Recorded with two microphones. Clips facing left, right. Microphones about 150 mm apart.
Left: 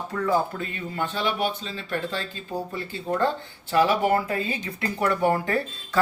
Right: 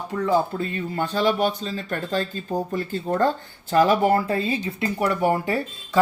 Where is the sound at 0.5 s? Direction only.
35° right (ahead or behind).